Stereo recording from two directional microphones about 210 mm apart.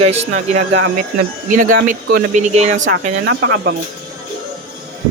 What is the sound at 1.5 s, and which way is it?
Speech, 40° right (ahead or behind).